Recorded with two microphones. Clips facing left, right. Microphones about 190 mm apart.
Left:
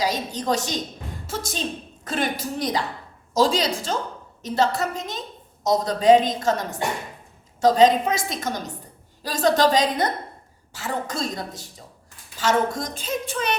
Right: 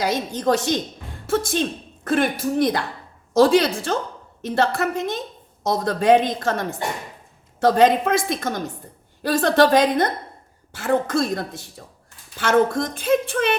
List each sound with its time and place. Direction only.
0.0 s a woman's voice: 55° right (ahead or behind)